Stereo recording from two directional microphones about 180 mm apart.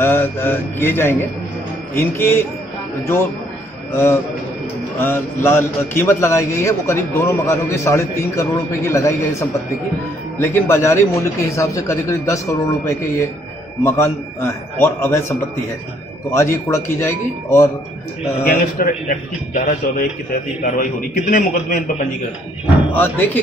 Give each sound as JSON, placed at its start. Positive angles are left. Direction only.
{"t": 0.0, "sound": "a man's voice", "side_deg": 10}
{"t": 3.9, "sound": "a man's voice", "side_deg": 15}
{"t": 18.4, "sound": "a man's voice", "side_deg": 50}
{"t": 22.9, "sound": "a man's voice", "side_deg": 10}